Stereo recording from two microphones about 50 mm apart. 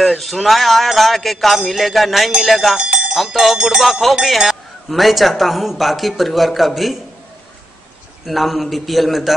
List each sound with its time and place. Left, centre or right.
0.0 s speech: centre
2.8 s a sound: centre
3.2 s speech: centre
3.5 s a sound: centre
3.8 s speech: centre
8.3 s speech: centre